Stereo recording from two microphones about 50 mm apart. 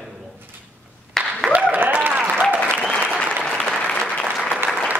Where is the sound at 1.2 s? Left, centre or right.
Centre.